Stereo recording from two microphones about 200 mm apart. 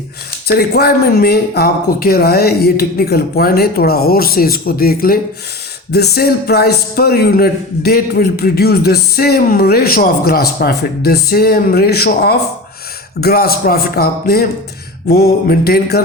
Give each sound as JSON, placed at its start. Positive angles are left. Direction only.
{"t": 0.4, "sound": "a man's voice", "side_deg": 50}